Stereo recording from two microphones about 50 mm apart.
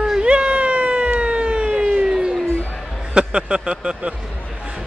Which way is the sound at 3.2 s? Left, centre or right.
Right.